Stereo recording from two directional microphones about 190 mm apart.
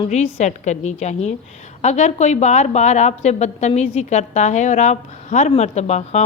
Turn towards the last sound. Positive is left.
turn(degrees=35)  # may be behind; listen again after turning